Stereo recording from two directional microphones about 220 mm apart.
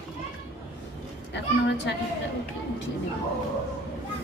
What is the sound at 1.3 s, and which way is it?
Speech, 55° left (ahead or behind).